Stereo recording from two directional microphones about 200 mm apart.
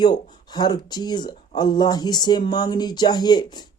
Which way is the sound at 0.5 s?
20° left (ahead or behind).